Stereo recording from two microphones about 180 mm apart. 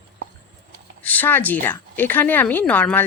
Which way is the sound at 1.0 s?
10° left (ahead or behind).